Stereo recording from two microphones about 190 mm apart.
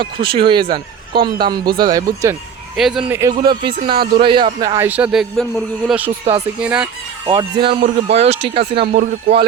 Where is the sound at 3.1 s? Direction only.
15° right (ahead or behind).